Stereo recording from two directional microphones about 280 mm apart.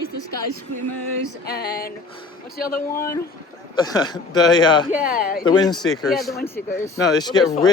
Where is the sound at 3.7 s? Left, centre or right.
Centre.